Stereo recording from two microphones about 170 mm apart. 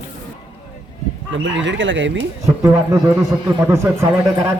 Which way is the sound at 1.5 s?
90° right.